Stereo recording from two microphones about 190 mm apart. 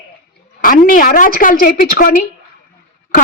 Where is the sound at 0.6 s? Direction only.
45° left (ahead or behind).